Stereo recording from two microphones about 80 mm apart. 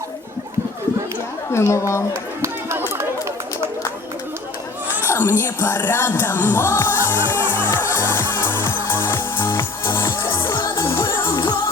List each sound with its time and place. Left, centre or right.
1.5 s speech: left
2.4 s a sound: right
2.9 s run: right
5.0 s music: left
11.3 s music: left